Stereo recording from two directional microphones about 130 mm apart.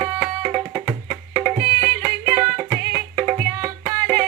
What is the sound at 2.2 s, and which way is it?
Music, 40° right (ahead or behind).